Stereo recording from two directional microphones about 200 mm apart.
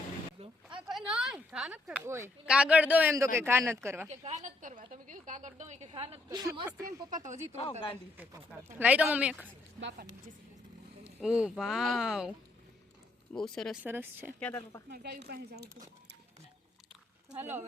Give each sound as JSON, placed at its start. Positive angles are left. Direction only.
{"t": 0.9, "sound": "speech", "side_deg": -5}
{"t": 4.1, "sound": "a woman's voice", "side_deg": -35}
{"t": 7.1, "sound": "a woman's voice", "side_deg": -40}
{"t": 7.5, "sound": "speech", "side_deg": 30}
{"t": 8.2, "sound": "speech", "side_deg": -10}
{"t": 11.2, "sound": "speech", "side_deg": -5}
{"t": 13.3, "sound": "speech", "side_deg": 0}
{"t": 13.8, "sound": "speech", "side_deg": -10}
{"t": 14.3, "sound": "speech", "side_deg": 5}
{"t": 14.8, "sound": "speech", "side_deg": -55}
{"t": 17.3, "sound": "speech", "side_deg": -10}